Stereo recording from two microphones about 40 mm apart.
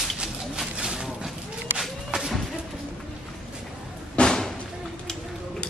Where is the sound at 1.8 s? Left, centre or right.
Centre.